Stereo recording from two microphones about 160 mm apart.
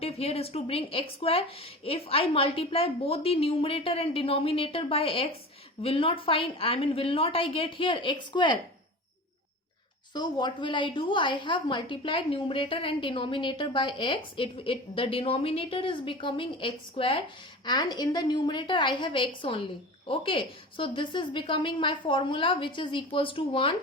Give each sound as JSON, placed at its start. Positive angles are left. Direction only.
{"t": 0.0, "sound": "a woman's voice", "side_deg": 40}
{"t": 10.2, "sound": "a woman's voice", "side_deg": 25}